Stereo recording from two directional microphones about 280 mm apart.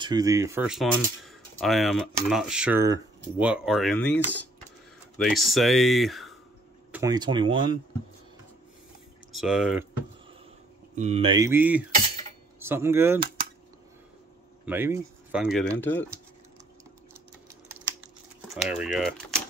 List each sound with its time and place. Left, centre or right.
0.0 s speech: centre
6.9 s speech: centre
9.3 s speech: centre
11.0 s speech: right
14.7 s speech: centre
18.5 s speech: centre